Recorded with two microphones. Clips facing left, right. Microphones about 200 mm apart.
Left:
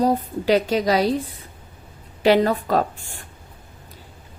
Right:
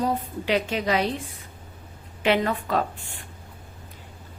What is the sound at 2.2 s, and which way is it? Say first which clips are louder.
Speech: left 6 dB; 35° left (ahead or behind).